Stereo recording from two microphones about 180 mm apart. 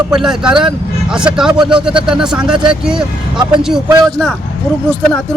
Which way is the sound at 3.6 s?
5° right (ahead or behind).